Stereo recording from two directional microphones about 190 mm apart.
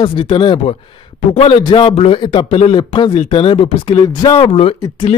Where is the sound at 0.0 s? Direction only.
25° left (ahead or behind).